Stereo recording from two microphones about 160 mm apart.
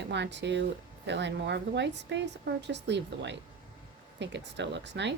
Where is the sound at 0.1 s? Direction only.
90° right.